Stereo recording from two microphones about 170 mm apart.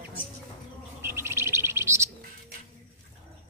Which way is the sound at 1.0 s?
15° right (ahead or behind).